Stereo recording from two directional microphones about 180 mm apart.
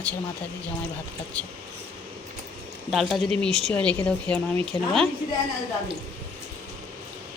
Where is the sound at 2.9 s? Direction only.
Centre (ahead or behind).